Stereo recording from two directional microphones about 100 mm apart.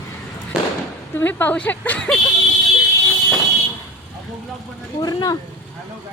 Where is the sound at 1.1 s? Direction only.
20° left (ahead or behind).